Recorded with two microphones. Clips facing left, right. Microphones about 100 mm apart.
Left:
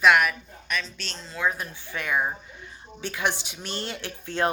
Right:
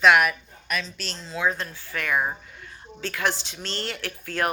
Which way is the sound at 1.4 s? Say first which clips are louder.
Right 1 dB; 15° left (ahead or behind).